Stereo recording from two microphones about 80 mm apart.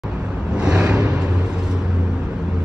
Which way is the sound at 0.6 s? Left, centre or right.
Centre.